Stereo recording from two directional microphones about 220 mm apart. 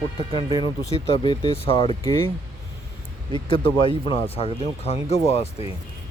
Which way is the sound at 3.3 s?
20° left (ahead or behind).